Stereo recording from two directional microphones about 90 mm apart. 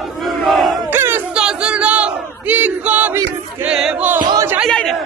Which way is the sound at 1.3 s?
10° right (ahead or behind).